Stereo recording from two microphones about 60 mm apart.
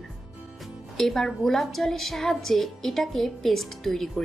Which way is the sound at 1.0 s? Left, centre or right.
Centre.